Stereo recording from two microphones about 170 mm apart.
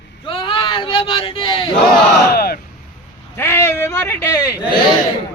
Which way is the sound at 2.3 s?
65° left (ahead or behind).